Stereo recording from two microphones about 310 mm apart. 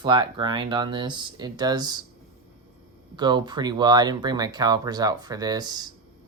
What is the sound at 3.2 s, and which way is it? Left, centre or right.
Speech, centre.